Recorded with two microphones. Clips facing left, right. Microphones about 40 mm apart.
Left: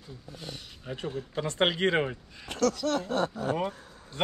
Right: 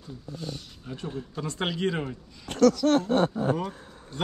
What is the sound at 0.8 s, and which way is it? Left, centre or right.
Speech, left.